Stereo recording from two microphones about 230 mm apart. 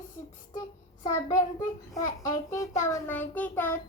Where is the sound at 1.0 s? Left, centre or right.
Centre.